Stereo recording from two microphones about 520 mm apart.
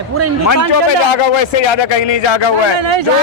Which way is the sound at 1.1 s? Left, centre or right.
Left.